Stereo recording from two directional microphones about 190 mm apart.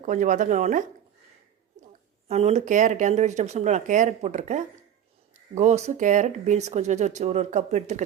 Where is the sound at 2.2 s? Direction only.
35° right (ahead or behind).